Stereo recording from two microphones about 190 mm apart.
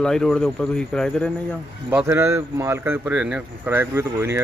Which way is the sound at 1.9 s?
15° right (ahead or behind).